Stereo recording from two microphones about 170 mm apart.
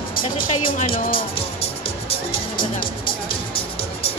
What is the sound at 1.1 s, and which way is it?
Music, 35° left (ahead or behind).